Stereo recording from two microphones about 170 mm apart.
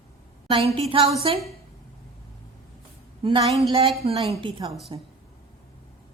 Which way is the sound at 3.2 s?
35° right (ahead or behind).